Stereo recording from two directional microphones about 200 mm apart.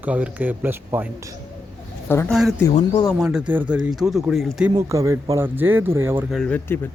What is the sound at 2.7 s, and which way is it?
Speech, 30° left (ahead or behind).